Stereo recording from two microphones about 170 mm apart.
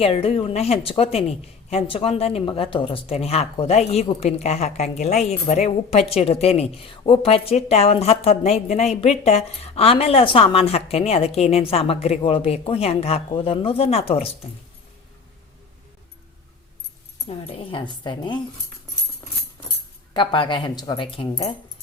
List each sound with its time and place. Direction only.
0.0 s speech: 35° left (ahead or behind)
17.2 s speech: 35° left (ahead or behind)
20.1 s speech: 30° left (ahead or behind)